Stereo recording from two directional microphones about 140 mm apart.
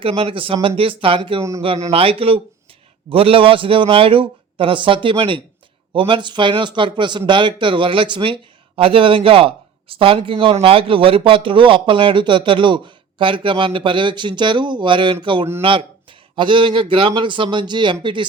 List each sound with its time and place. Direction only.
0.0 s speech: 40° right (ahead or behind)